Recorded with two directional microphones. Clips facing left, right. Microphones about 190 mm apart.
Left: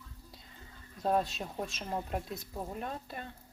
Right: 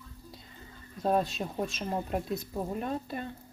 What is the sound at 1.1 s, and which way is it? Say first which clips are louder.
Speech: right 3 dB; 15° right (ahead or behind).